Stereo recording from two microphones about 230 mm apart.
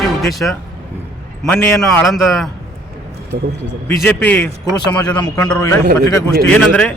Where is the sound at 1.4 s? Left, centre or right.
Centre.